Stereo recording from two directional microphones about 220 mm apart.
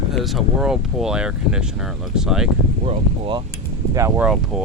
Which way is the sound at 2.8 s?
25° right (ahead or behind).